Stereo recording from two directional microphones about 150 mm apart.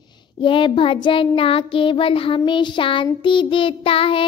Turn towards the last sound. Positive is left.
turn(degrees=40)  # may be behind; listen again after turning